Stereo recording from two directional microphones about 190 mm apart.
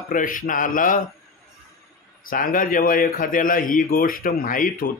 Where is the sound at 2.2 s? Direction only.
50° left (ahead or behind).